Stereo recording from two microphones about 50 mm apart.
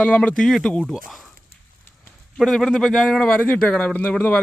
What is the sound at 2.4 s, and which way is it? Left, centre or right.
Speech, centre.